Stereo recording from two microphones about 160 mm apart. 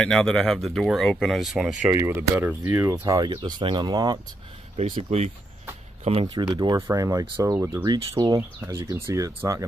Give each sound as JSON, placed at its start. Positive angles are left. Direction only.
{"t": 0.0, "sound": "speech", "side_deg": 5}
{"t": 1.9, "sound": "speech", "side_deg": -15}
{"t": 4.7, "sound": "speech", "side_deg": -40}
{"t": 6.2, "sound": "speech", "side_deg": -25}